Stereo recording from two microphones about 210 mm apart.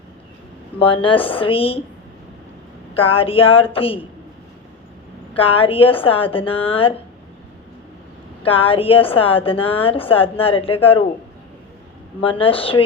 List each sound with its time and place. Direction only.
0.8 s a woman's voice: 25° left (ahead or behind)
2.9 s a woman's voice: 25° left (ahead or behind)
5.3 s a woman's voice: 25° left (ahead or behind)
8.4 s a woman's voice: 25° left (ahead or behind)
12.2 s a woman's voice: 25° left (ahead or behind)